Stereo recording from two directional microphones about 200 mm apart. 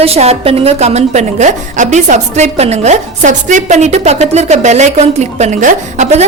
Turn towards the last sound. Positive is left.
turn(degrees=-35)  # may be behind; listen again after turning